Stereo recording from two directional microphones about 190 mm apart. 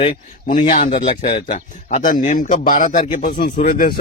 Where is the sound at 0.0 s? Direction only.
40° left (ahead or behind).